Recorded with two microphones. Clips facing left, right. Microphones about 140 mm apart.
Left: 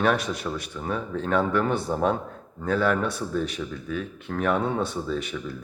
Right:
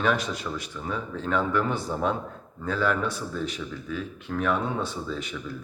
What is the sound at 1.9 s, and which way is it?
Speech, 40° left (ahead or behind).